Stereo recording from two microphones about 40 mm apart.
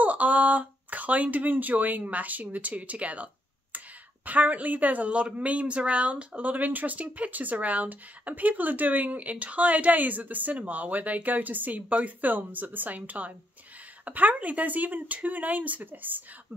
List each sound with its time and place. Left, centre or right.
0.0 s a woman's voice: right